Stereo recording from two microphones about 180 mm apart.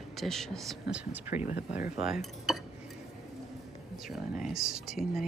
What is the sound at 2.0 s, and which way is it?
Cutlery, 5° right (ahead or behind).